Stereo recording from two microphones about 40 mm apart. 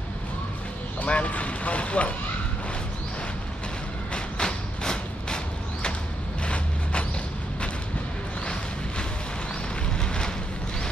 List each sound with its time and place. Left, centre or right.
1.0 s speech: left
4.1 s a sound: left
6.4 s vehicle: left
9.9 s boat: centre